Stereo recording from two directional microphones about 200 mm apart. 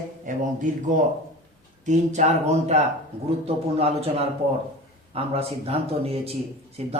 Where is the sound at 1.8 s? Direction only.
35° right (ahead or behind).